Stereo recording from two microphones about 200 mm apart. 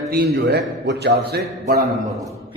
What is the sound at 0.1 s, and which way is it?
A man's voice, 60° right (ahead or behind).